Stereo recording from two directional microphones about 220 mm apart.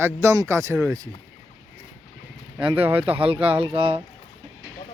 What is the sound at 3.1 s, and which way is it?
Speech, 25° right (ahead or behind).